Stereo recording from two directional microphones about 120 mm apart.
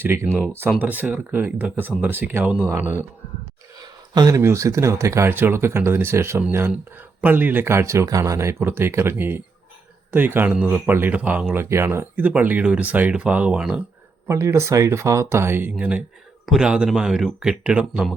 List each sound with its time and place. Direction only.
0.0 s speech: 20° right (ahead or behind)
3.8 s a sound: 35° right (ahead or behind)
4.4 s speech: 25° right (ahead or behind); by 13.8 s 10° right (ahead or behind)
14.3 s speech: 25° right (ahead or behind)